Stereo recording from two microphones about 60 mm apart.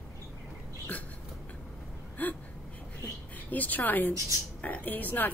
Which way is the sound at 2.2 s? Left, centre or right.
Left.